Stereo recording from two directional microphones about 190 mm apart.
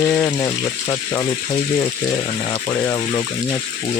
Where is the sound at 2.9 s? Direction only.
20° left (ahead or behind).